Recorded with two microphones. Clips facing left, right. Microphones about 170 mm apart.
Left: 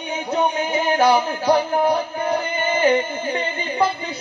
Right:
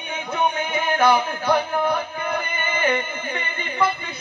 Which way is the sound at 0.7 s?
35° left (ahead or behind).